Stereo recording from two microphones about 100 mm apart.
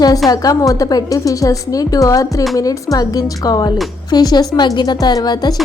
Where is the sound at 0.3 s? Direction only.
35° left (ahead or behind).